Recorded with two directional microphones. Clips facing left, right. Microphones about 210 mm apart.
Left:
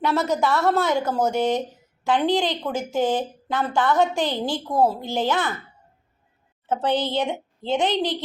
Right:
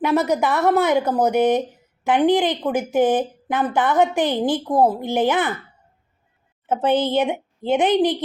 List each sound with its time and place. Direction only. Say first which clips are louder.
0.0 s a woman's voice: right 3 dB; 15° right (ahead or behind)
6.7 s a woman's voice: right 4 dB; 20° right (ahead or behind)